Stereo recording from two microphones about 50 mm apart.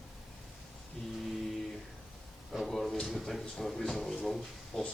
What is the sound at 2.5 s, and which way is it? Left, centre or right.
Speech, centre.